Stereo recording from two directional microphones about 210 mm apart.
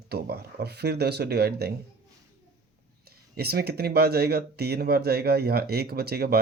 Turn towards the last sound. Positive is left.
turn(degrees=-45)  # may be behind; listen again after turning